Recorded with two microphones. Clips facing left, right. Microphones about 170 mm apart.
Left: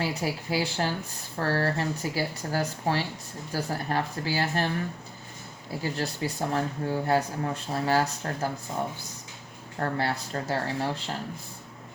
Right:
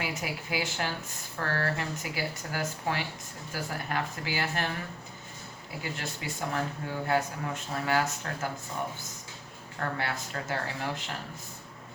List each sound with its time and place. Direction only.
0.0 s speech: 35° left (ahead or behind)
5.8 s speech: 35° left (ahead or behind)
9.7 s speech: 35° left (ahead or behind)